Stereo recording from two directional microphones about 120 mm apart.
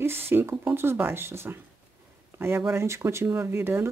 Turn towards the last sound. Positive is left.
turn(degrees=-20)  # may be behind; listen again after turning